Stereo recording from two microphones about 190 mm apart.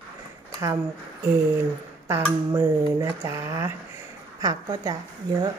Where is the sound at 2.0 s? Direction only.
15° right (ahead or behind).